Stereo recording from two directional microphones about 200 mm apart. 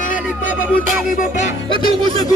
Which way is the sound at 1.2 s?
35° left (ahead or behind).